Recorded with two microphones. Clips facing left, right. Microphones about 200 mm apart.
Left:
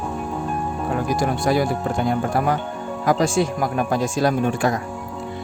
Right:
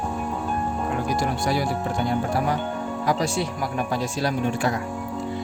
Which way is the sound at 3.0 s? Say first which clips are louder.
Left 6 dB; 50° left (ahead or behind).